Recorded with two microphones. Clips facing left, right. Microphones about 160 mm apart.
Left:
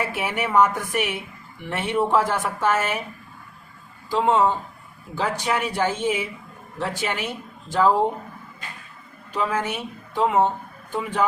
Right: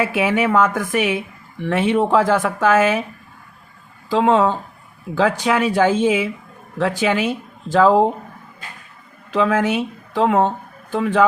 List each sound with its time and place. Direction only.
0.0 s speech: 90° right
4.1 s speech: 90° right
9.3 s speech: 90° right